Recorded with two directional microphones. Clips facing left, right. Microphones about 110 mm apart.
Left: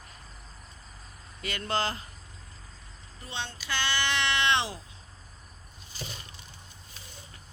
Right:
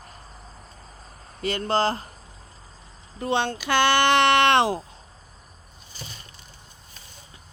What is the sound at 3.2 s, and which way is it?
Speech, 65° right (ahead or behind).